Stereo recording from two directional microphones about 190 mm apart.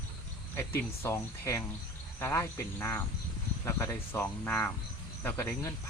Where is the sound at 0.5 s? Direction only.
15° left (ahead or behind).